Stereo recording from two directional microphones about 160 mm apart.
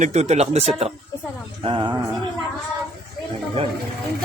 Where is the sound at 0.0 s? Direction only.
45° right (ahead or behind).